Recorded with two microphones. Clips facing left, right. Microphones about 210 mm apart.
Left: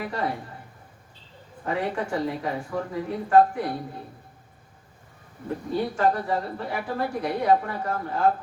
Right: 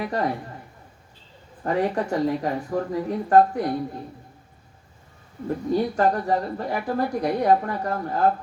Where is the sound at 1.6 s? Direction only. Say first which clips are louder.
Right 4 dB; 40° right (ahead or behind).